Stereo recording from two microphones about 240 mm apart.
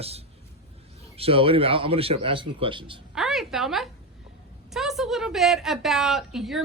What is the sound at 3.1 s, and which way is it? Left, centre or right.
A woman's voice, centre.